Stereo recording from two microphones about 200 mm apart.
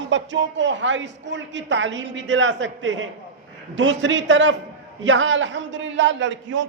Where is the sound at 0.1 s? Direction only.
65° right (ahead or behind).